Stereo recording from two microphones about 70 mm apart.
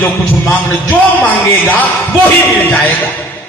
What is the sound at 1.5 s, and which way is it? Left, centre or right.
Speech, left.